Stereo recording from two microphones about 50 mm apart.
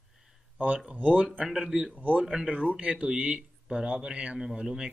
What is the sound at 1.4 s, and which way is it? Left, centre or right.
Speech, centre.